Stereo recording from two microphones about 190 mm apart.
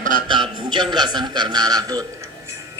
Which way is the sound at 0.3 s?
25° right (ahead or behind).